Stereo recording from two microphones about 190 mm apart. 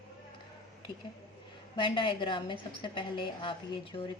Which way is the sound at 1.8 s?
25° left (ahead or behind).